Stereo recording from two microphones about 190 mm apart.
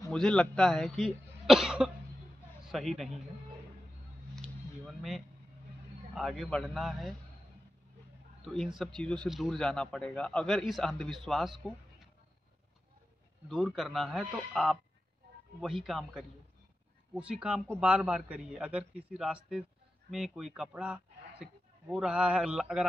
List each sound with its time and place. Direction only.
0.1 s a man's voice: 5° left (ahead or behind)
4.8 s speech: centre (ahead or behind)
8.5 s speech: centre (ahead or behind)
13.5 s speech: centre (ahead or behind)